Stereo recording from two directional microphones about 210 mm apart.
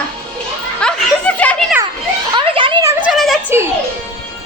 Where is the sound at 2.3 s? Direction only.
25° right (ahead or behind).